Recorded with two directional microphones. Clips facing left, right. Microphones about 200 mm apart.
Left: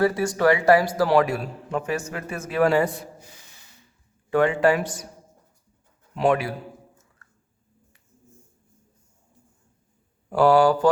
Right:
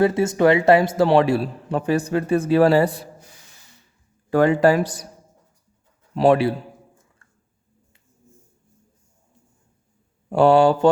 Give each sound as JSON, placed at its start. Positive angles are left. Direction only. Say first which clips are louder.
{"t": 0.0, "sound": "a man's voice", "louder": "right 4 dB", "side_deg": -25}
{"t": 4.3, "sound": "a man's voice", "louder": "right 3 dB", "side_deg": -40}
{"t": 6.1, "sound": "a man's voice", "louder": "right 5 dB", "side_deg": -35}
{"t": 7.2, "sound": "squish", "louder": "left 1 dB", "side_deg": -25}
{"t": 10.2, "sound": "speech", "louder": "right 3 dB", "side_deg": -25}